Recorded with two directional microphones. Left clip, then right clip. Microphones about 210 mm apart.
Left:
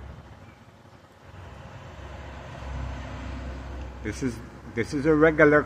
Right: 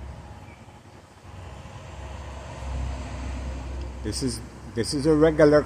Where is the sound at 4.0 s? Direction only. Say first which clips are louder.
Right 1 dB; 20° right (ahead or behind).